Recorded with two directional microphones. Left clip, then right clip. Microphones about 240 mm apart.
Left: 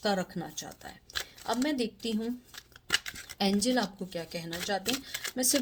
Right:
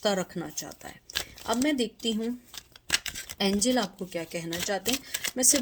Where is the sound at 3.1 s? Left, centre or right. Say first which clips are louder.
Right 2 dB; right.